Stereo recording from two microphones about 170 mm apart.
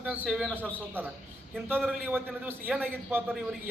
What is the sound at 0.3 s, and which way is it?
A man's voice, centre (ahead or behind).